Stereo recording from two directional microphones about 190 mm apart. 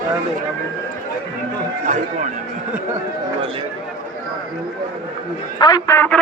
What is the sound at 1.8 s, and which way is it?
Speech, 40° right (ahead or behind).